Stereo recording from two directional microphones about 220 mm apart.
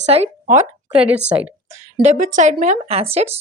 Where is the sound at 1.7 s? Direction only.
30° right (ahead or behind).